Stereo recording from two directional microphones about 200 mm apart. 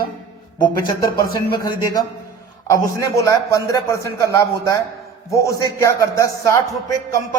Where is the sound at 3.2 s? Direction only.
15° left (ahead or behind).